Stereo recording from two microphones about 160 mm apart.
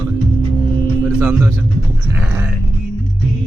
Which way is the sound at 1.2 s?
15° right (ahead or behind).